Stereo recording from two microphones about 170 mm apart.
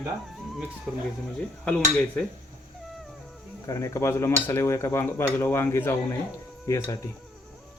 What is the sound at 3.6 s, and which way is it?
Speech, 20° left (ahead or behind).